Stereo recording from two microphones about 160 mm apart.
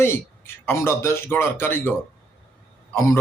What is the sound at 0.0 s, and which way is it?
A man's voice, 15° left (ahead or behind).